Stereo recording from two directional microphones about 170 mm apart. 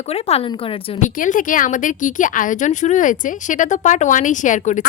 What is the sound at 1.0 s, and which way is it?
Speech, 50° left (ahead or behind).